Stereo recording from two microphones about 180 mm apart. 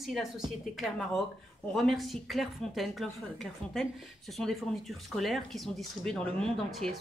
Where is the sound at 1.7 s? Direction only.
Centre (ahead or behind).